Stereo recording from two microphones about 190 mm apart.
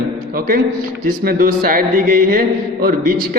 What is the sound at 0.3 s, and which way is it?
A man's voice, 50° right (ahead or behind).